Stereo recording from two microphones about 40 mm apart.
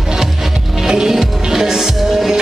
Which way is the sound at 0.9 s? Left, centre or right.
Centre.